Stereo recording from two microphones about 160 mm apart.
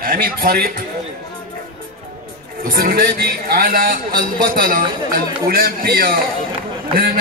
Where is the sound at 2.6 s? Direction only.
65° right (ahead or behind).